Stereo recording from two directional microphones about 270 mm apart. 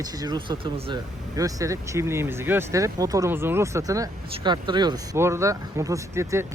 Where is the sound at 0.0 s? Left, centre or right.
Centre.